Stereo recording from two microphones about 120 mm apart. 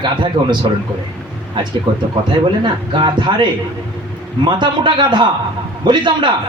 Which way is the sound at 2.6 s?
40° right (ahead or behind).